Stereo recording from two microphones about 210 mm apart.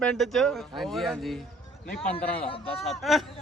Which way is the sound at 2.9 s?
Centre (ahead or behind).